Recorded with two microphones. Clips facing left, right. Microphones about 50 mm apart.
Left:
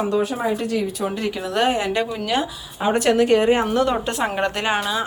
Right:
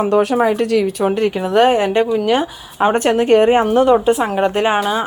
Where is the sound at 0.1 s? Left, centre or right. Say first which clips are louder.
Right 7 dB; right.